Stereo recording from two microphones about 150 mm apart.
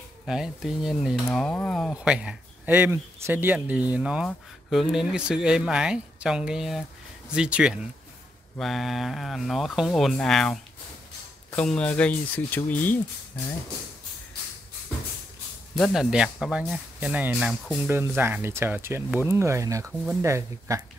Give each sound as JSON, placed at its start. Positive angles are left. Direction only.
{"t": 0.3, "sound": "speech", "side_deg": -5}
{"t": 15.7, "sound": "speech", "side_deg": 0}